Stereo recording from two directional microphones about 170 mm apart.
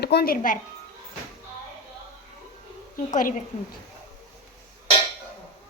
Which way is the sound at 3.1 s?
50° left (ahead or behind).